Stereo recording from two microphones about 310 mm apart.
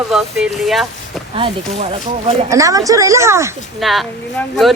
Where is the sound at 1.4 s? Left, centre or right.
Centre.